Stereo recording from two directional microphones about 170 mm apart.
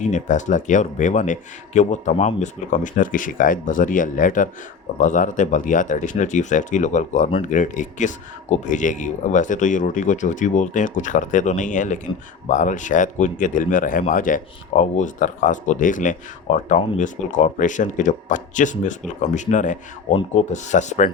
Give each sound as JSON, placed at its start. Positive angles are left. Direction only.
{"t": 0.0, "sound": "speech", "side_deg": 45}